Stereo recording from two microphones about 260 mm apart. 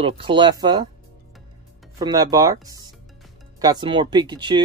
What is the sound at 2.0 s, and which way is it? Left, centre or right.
Speech, centre.